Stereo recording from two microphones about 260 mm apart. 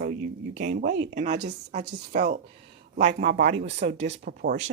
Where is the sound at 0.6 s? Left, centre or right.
Right.